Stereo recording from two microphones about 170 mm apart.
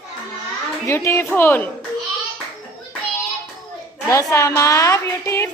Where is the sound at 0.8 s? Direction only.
15° left (ahead or behind).